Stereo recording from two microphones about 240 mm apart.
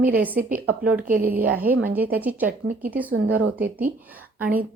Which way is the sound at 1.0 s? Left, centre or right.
Right.